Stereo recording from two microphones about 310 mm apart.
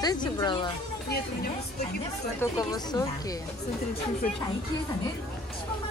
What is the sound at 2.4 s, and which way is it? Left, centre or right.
Speech, centre.